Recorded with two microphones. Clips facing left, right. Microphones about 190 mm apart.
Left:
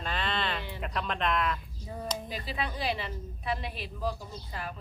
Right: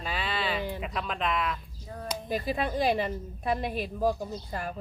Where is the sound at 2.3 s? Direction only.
50° right (ahead or behind).